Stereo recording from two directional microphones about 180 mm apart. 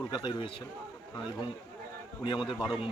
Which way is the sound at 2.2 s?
25° left (ahead or behind).